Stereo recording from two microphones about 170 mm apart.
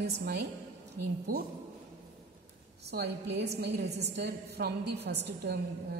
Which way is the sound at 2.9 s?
75° right (ahead or behind).